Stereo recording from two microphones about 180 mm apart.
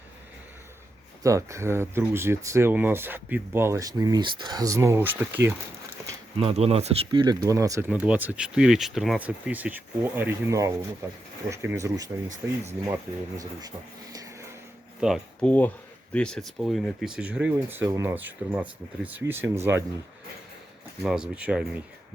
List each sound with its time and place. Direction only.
1.2 s speech: 15° right (ahead or behind)
6.4 s speech: 35° right (ahead or behind); by 7.9 s 15° right (ahead or behind)
7.9 s speech: 5° right (ahead or behind)
15.0 s speech: centre (ahead or behind); by 19.8 s 15° right (ahead or behind)
21.0 s speech: 5° right (ahead or behind)